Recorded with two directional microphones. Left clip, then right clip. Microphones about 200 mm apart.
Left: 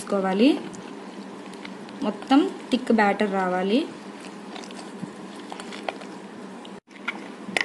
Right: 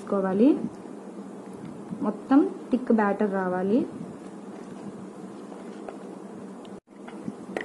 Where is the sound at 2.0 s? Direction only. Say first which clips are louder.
Left 1 dB; 15° left (ahead or behind).